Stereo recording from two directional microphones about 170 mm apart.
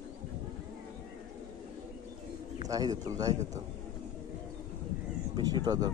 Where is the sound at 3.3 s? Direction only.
40° right (ahead or behind).